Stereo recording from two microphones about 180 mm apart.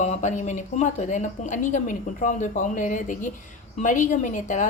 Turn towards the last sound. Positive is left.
turn(degrees=45)  # may be behind; listen again after turning